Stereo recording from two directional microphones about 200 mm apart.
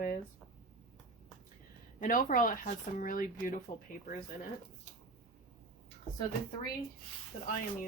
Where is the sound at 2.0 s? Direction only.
45° left (ahead or behind).